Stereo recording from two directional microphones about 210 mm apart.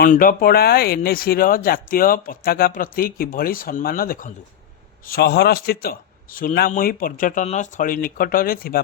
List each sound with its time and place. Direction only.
0.0 s speech: 40° left (ahead or behind)